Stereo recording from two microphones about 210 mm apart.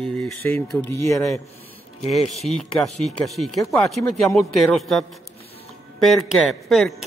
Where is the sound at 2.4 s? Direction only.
Centre (ahead or behind).